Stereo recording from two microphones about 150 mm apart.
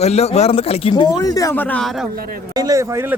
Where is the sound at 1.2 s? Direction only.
25° left (ahead or behind).